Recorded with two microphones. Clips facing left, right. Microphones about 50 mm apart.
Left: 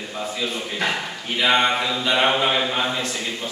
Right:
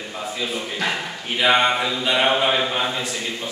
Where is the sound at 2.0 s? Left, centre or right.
Centre.